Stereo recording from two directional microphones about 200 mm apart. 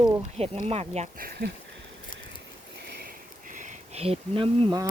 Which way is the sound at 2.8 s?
50° right (ahead or behind).